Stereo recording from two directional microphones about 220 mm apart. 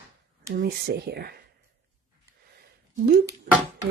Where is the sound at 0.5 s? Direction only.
45° right (ahead or behind).